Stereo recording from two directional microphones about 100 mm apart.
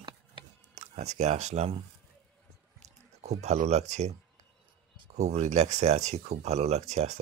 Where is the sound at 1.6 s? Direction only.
90° right.